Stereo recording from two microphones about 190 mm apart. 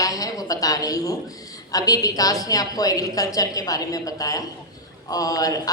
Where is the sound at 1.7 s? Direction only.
20° left (ahead or behind).